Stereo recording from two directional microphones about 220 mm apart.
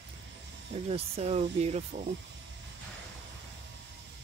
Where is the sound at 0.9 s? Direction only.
30° right (ahead or behind).